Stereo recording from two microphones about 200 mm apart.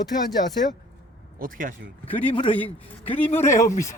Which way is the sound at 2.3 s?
25° left (ahead or behind).